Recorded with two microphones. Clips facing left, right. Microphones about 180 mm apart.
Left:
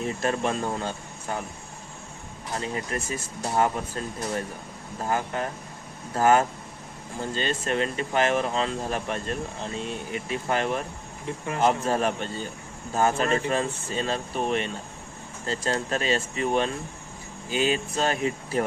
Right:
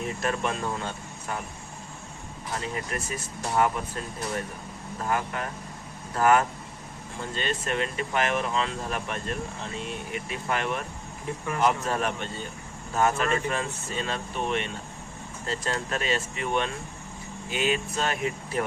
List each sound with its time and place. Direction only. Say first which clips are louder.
0.2 s speech: left 2 dB; 30° left (ahead or behind)
2.6 s speech: left 3 dB; 30° left (ahead or behind)
5.0 s speech: left 2 dB; 30° left (ahead or behind)